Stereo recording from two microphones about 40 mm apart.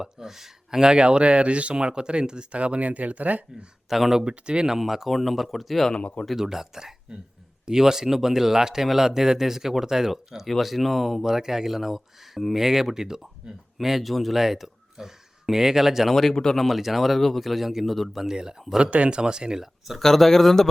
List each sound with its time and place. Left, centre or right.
0.0 s speech: centre; by 3.4 s right
3.8 s speech: centre
4.2 s speech: right
4.8 s speech: centre
6.3 s speech: centre
16.3 s speech: centre
16.6 s speech: centre
18.8 s speech: right
20.0 s speech: centre